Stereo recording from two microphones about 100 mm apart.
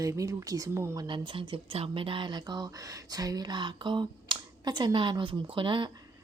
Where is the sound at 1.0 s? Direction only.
55° right (ahead or behind).